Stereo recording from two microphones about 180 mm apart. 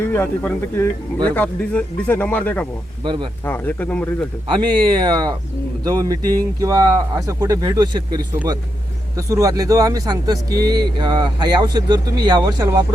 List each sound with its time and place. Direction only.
0.1 s speech: 10° left (ahead or behind)
3.0 s speech: 25° right (ahead or behind)
3.4 s speech: 10° left (ahead or behind)
4.6 s speech: 25° right (ahead or behind)